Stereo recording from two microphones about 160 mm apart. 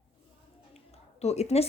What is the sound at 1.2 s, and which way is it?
Speech, 40° left (ahead or behind).